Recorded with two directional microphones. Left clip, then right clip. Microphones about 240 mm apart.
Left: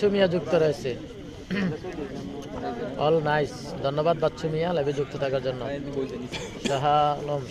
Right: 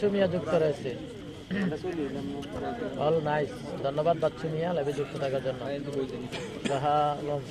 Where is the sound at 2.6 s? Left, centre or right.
Left.